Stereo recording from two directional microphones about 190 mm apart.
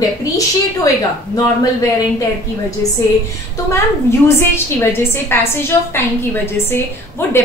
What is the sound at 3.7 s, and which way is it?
A woman's voice, 15° left (ahead or behind).